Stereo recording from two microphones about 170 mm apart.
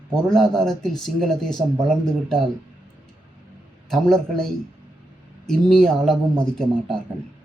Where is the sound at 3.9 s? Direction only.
Centre (ahead or behind).